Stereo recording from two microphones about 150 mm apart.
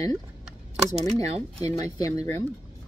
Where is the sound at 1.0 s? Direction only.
45° right (ahead or behind).